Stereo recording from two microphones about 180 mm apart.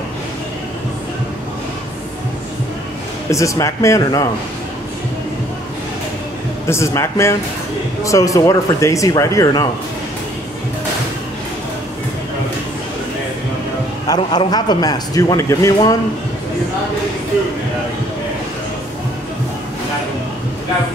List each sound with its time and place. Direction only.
3.3 s speech: 15° left (ahead or behind)
6.7 s speech: 15° left (ahead or behind)
14.0 s a man's voice: 25° left (ahead or behind)